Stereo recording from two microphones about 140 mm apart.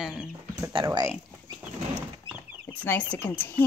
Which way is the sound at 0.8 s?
20° right (ahead or behind).